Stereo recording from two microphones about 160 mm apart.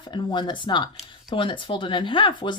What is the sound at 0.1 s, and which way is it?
Speech, 30° left (ahead or behind).